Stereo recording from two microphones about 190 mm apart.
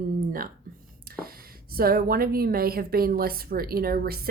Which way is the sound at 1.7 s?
50° right (ahead or behind).